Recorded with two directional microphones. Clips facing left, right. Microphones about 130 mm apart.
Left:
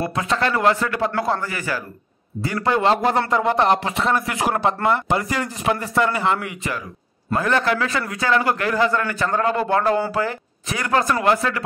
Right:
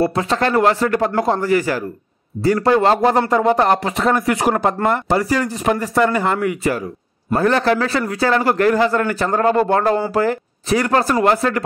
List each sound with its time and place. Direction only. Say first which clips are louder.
0.0 s a man's voice: right 4 dB; 35° right (ahead or behind)